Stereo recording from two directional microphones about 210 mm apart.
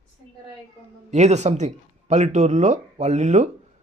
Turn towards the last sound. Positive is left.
turn(degrees=-35)  # may be behind; listen again after turning